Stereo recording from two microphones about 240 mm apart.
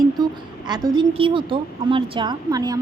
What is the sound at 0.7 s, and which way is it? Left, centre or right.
A woman's voice, centre.